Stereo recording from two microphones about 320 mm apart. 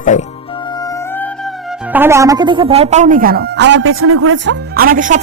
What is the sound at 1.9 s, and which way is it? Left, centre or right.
A woman's voice, centre.